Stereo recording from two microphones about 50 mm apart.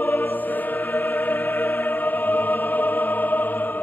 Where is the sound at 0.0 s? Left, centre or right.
Left.